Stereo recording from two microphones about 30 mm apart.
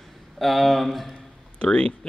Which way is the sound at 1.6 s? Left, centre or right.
Left.